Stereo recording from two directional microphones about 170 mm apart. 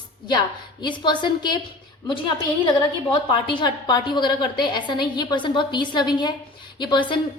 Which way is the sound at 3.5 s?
25° left (ahead or behind).